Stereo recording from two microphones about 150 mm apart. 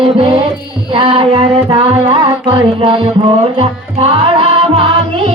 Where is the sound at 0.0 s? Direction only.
40° right (ahead or behind).